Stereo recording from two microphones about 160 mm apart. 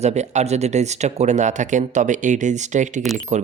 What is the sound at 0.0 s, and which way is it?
Speech, 45° right (ahead or behind).